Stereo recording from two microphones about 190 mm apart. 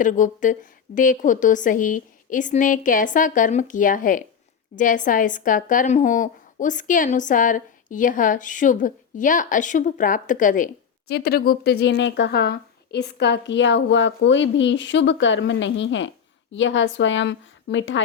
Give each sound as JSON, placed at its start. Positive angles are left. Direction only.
{"t": 0.0, "sound": "speech", "side_deg": 45}
{"t": 11.1, "sound": "a woman's voice", "side_deg": 55}